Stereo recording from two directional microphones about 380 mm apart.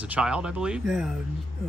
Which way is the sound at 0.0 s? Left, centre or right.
Centre.